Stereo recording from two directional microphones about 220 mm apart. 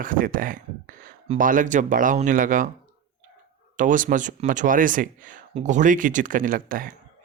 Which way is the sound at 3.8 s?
35° right (ahead or behind).